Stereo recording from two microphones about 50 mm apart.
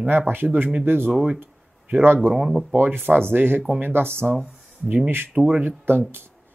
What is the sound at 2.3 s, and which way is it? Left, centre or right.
Speech, centre.